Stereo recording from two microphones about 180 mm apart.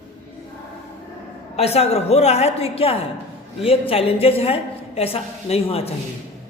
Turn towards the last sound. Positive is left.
turn(degrees=35)  # may be behind; listen again after turning